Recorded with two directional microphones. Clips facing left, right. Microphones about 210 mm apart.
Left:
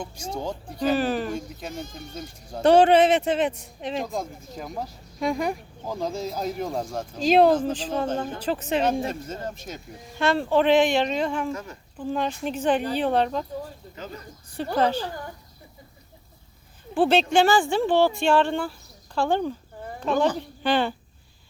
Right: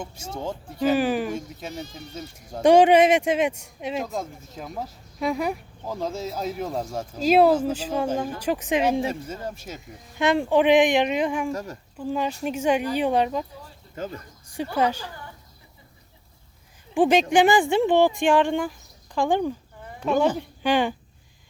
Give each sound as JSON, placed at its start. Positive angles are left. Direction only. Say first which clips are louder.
{"t": 0.3, "sound": "speech", "louder": "right 1 dB", "side_deg": -5}
{"t": 1.7, "sound": "speech", "louder": "even", "side_deg": 50}
{"t": 2.1, "sound": "speech", "louder": "right 1 dB", "side_deg": -10}
{"t": 11.5, "sound": "speech", "louder": "right 3 dB", "side_deg": -40}
{"t": 11.9, "sound": "speech", "louder": "even", "side_deg": -10}
{"t": 13.8, "sound": "a sound", "louder": "right 2 dB", "side_deg": 45}
{"t": 14.4, "sound": "a sound", "louder": "right 1 dB", "side_deg": -10}
{"t": 14.8, "sound": "speech", "louder": "left 1 dB", "side_deg": -10}
{"t": 16.9, "sound": "speech", "louder": "right 1 dB", "side_deg": -15}